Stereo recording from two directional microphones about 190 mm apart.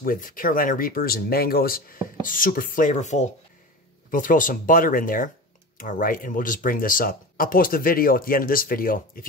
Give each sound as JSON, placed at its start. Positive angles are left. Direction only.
{"t": 0.0, "sound": "speech", "side_deg": 50}